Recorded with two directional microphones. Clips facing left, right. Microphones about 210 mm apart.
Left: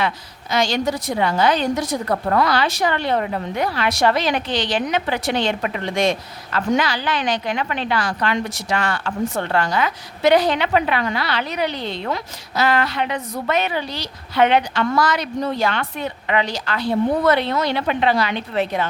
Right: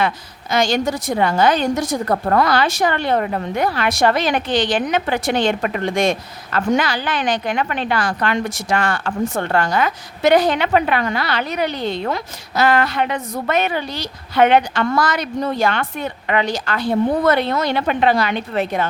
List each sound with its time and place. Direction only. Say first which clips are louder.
0.5 s a woman's voice: right 2 dB; 50° right (ahead or behind)